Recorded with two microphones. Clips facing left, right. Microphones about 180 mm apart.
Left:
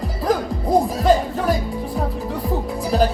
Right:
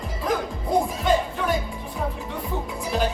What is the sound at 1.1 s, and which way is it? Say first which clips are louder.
Music: left 6 dB; 35° left (ahead or behind).